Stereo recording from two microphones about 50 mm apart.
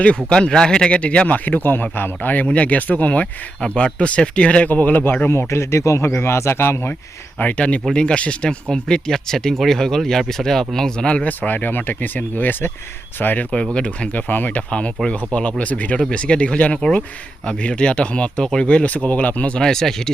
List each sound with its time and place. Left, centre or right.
0.3 s a man's voice: centre; by 5.3 s left
5.3 s speech: left
7.3 s a man's voice: left
11.3 s speech: left
13.7 s a man's voice: left
14.1 s speech: left
14.7 s a man's voice: left
19.5 s speech: centre